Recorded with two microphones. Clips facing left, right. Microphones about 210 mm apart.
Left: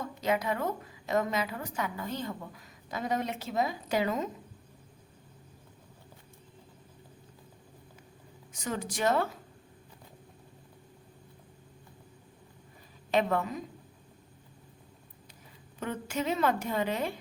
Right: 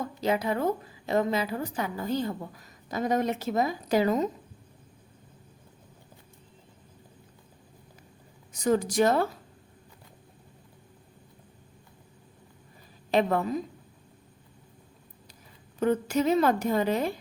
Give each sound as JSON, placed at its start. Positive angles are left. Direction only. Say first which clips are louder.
{"t": 0.0, "sound": "a woman's voice", "louder": "right 3 dB", "side_deg": -30}
{"t": 8.5, "sound": "a woman's voice", "louder": "right 11 dB", "side_deg": -40}
{"t": 13.1, "sound": "a woman's voice", "louder": "right 3 dB", "side_deg": -35}
{"t": 15.8, "sound": "a woman's voice", "louder": "right 9 dB", "side_deg": -40}